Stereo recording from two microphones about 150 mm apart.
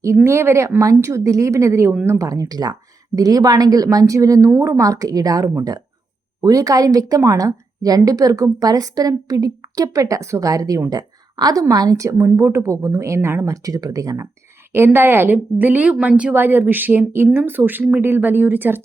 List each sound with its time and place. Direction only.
0.3 s a woman's voice: 15° right (ahead or behind)